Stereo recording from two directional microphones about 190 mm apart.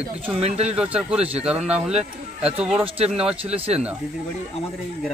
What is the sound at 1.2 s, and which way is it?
Speech, 30° right (ahead or behind).